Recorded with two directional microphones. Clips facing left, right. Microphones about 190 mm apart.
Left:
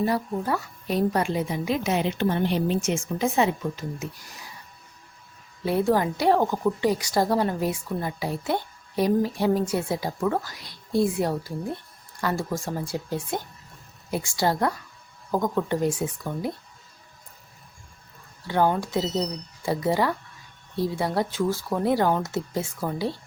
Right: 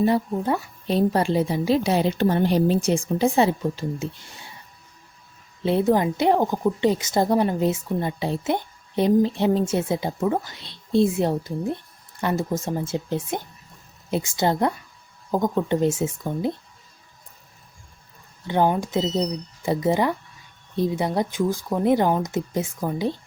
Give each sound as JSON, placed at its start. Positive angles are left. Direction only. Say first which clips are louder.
{"t": 0.0, "sound": "a woman's voice", "louder": "right 4 dB", "side_deg": -25}
{"t": 5.6, "sound": "a woman's voice", "louder": "right 3 dB", "side_deg": -20}
{"t": 18.4, "sound": "a woman's voice", "louder": "right 2 dB", "side_deg": -20}